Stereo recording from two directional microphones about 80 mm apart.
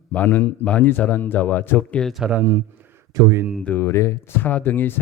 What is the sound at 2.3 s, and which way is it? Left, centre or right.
Speech, right.